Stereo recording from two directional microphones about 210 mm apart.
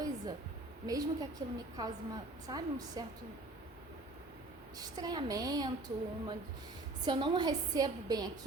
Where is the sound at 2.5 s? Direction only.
20° right (ahead or behind).